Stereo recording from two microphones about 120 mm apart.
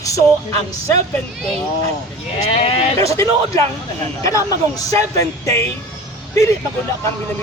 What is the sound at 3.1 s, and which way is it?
Speech, 25° left (ahead or behind).